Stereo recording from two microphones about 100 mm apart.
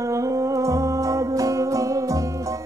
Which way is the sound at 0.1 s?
30° right (ahead or behind).